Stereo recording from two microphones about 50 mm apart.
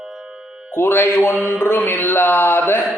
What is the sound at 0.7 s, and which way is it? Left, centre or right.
Speech, left.